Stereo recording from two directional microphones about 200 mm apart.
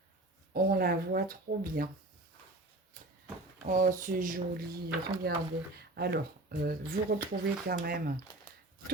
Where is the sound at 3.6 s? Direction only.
40° right (ahead or behind).